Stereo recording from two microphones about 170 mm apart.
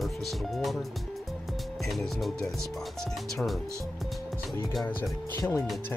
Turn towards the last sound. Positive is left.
turn(degrees=15)  # may be behind; listen again after turning